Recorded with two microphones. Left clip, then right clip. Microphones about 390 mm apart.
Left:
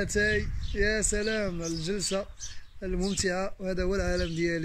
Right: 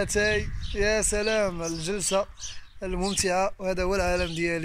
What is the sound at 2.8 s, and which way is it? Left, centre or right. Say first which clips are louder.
Speech: right 3 dB; centre.